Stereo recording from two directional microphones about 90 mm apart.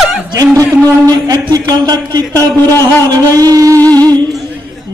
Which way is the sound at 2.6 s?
25° left (ahead or behind).